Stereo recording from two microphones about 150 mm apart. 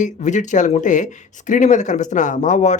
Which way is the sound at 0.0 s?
55° left (ahead or behind).